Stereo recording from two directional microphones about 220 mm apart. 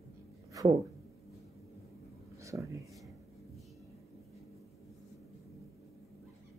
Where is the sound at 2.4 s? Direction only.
15° right (ahead or behind).